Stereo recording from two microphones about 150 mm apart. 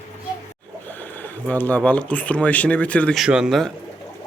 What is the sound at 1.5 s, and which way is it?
Speech, 10° left (ahead or behind).